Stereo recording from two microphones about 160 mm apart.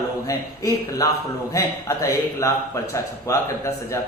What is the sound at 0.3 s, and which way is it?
A man's voice, 20° left (ahead or behind).